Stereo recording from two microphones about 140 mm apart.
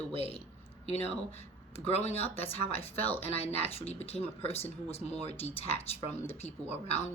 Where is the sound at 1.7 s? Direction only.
45° left (ahead or behind).